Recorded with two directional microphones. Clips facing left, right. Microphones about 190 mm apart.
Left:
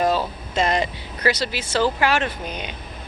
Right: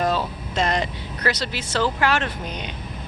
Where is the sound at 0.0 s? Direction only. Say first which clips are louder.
Left 2 dB; 5° left (ahead or behind).